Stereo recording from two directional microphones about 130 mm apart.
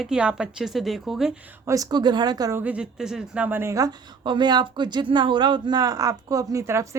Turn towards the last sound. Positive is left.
turn(degrees=-25)  # may be behind; listen again after turning